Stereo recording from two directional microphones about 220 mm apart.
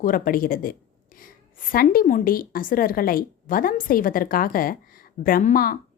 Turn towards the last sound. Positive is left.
turn(degrees=40)  # may be behind; listen again after turning